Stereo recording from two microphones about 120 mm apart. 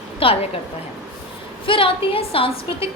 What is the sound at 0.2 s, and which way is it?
Speech, 50° left (ahead or behind).